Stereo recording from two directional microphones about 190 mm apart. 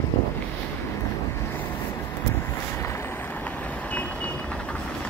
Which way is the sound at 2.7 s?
15° left (ahead or behind).